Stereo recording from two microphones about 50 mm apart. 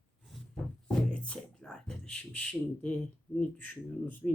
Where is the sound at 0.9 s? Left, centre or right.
Left.